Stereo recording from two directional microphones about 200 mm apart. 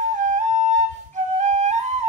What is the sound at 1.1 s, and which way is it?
Flute, 35° right (ahead or behind).